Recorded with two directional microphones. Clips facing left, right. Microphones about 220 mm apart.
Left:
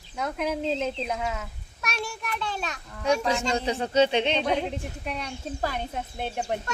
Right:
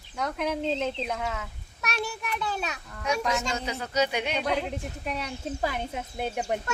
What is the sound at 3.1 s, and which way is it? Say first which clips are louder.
Speech: left 4 dB; 30° left (ahead or behind).